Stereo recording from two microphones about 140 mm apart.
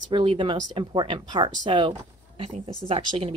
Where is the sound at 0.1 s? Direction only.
40° right (ahead or behind).